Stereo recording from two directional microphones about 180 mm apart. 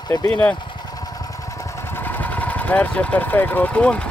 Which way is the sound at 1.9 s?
10° left (ahead or behind).